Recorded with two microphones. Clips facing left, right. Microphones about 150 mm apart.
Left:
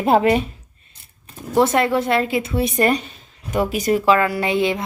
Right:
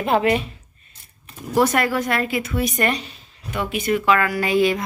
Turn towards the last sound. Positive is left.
turn(degrees=25)  # may be behind; listen again after turning